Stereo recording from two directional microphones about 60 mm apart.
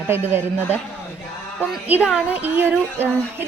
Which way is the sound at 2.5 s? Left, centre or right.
Right.